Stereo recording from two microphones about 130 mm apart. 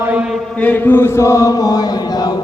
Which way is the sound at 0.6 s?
15° left (ahead or behind).